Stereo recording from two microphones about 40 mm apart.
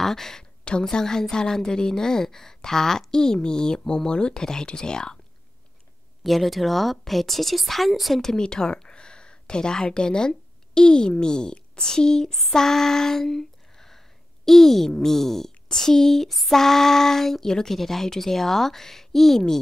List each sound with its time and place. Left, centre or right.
0.0 s speech: centre
0.8 s female singing: centre
6.2 s speech: centre
8.2 s speech: centre
11.5 s female singing: left